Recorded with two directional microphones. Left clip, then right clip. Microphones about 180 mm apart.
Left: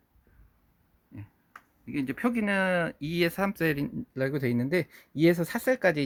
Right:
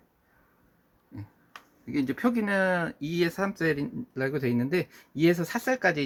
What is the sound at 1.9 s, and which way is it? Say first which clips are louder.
Speech: right 2 dB; 45° left (ahead or behind).